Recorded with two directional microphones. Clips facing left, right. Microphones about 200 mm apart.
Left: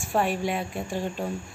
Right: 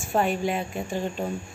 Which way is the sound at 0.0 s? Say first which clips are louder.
Right 1 dB; centre (ahead or behind).